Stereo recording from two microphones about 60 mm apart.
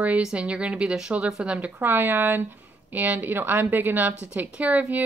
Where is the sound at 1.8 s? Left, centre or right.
Right.